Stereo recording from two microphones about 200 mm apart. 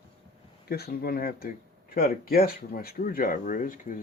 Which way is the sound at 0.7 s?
50° left (ahead or behind).